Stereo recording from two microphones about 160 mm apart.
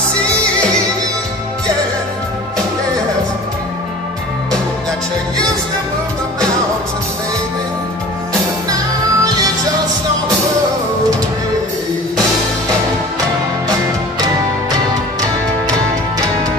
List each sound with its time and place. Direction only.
8.6 s music: 25° right (ahead or behind)